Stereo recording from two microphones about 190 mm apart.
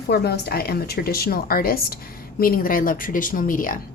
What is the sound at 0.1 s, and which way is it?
Speech, 60° left (ahead or behind).